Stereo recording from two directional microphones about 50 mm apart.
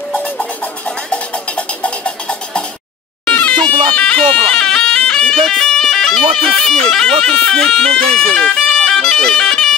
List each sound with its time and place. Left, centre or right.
0.1 s music: left
3.3 s bagpipes: left
5.3 s speech: centre